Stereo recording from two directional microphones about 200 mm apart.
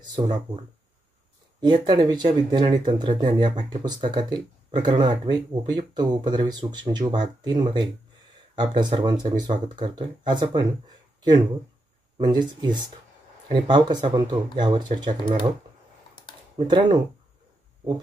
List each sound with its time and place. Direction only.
1.6 s speech: 20° right (ahead or behind)
12.2 s speech: 20° right (ahead or behind)
16.5 s speech: 25° right (ahead or behind)